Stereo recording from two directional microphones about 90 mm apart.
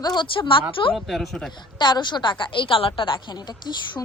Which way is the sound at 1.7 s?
55° left (ahead or behind).